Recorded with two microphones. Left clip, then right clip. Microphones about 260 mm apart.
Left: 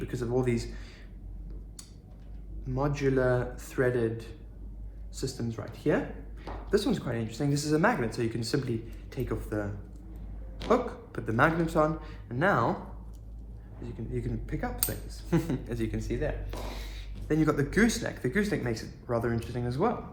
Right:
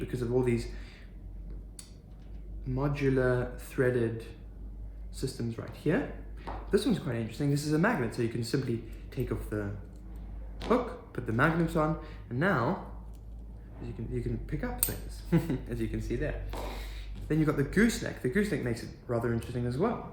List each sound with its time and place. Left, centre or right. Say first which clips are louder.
0.0 s speech: even; centre
2.7 s speech: left 2 dB; centre
10.7 s speech: left 2 dB; centre
14.1 s speech: left 1 dB; centre
16.5 s speech: right 1 dB; centre
17.2 s speech: left 2 dB; centre